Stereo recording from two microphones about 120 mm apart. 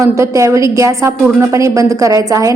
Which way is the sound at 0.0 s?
25° right (ahead or behind).